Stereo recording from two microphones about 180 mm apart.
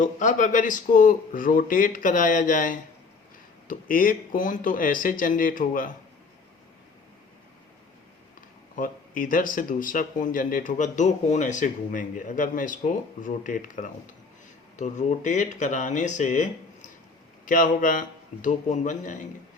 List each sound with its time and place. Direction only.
0.0 s speech: 45° left (ahead or behind)
8.7 s speech: 50° left (ahead or behind)